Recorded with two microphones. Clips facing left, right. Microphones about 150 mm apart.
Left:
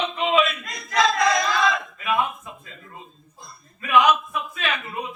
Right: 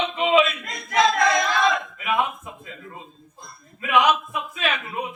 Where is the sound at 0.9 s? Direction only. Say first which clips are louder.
Right 2 dB; 25° right (ahead or behind).